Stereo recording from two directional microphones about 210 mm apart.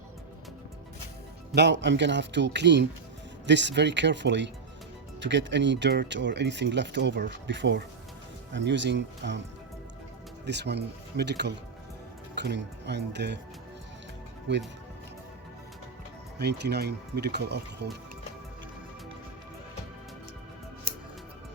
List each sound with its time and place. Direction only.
1.5 s speech: 55° right (ahead or behind)
10.4 s speech: 55° right (ahead or behind)
14.5 s speech: 60° right (ahead or behind)
16.4 s speech: 50° right (ahead or behind)